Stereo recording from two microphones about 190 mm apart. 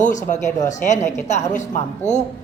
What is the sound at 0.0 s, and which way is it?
A woman's voice, 40° left (ahead or behind).